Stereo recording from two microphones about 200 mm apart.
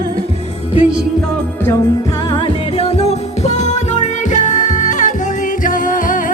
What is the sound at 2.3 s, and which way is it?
Music, 25° left (ahead or behind).